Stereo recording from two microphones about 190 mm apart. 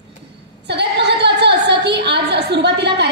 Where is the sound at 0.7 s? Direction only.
60° right (ahead or behind).